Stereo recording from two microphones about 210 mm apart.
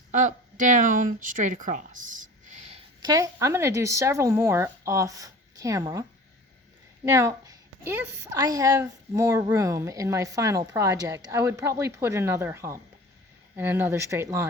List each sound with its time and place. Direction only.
0.1 s speech: 40° right (ahead or behind)
3.0 s a woman's voice: 15° right (ahead or behind)